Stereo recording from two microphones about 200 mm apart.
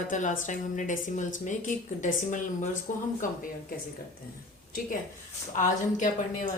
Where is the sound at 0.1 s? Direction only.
40° left (ahead or behind).